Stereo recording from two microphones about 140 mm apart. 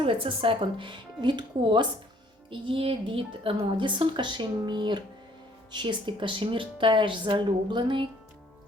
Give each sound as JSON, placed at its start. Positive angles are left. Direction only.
{"t": 0.0, "sound": "a woman's voice", "side_deg": -40}